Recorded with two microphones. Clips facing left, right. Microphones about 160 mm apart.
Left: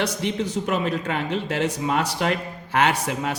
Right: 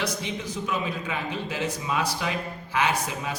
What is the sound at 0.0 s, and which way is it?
Speech, 70° left (ahead or behind).